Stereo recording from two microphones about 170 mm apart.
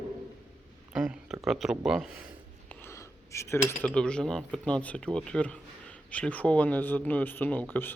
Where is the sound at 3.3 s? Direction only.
15° left (ahead or behind).